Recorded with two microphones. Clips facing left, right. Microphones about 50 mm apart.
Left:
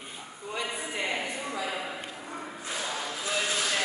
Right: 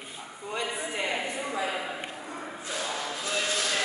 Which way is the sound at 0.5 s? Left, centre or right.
Centre.